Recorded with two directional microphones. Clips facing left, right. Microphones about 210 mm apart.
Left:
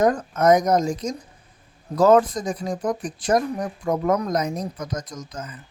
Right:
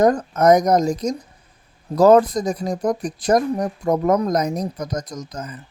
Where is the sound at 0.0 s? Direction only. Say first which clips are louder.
Right 3 dB; 40° right (ahead or behind).